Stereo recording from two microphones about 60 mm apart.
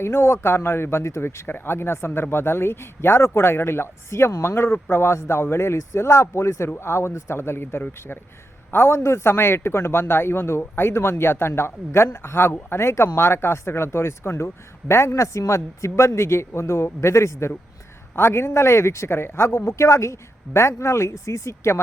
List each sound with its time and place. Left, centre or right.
0.0 s speech: left
7.3 s speech: left